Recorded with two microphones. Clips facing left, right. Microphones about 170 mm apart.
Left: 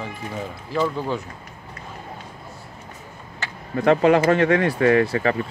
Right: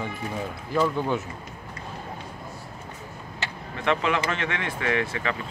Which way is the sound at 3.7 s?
40° left (ahead or behind).